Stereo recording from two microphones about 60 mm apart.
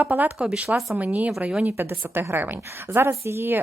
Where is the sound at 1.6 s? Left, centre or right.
Right.